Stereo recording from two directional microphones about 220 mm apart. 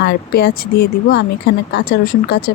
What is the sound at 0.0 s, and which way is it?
Speech, 50° left (ahead or behind).